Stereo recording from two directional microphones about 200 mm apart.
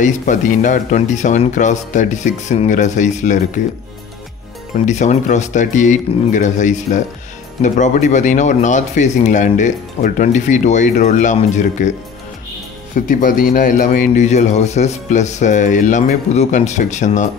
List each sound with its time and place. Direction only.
0.0 s speech: 40° left (ahead or behind)
4.7 s speech: 35° left (ahead or behind)
13.1 s speech: 40° left (ahead or behind)